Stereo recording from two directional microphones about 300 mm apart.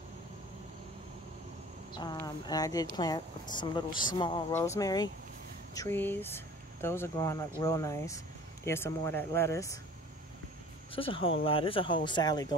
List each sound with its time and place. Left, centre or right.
2.0 s speech: centre
10.9 s speech: centre